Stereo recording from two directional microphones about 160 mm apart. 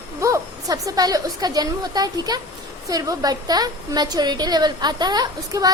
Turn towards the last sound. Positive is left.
turn(degrees=-25)  # may be behind; listen again after turning